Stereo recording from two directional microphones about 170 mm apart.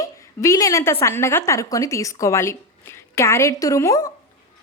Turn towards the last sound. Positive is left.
turn(degrees=20)  # may be behind; listen again after turning